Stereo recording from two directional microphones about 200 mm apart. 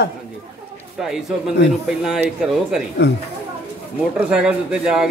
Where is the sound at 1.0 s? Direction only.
Centre (ahead or behind).